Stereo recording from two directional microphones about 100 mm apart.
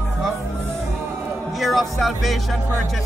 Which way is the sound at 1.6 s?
Centre (ahead or behind).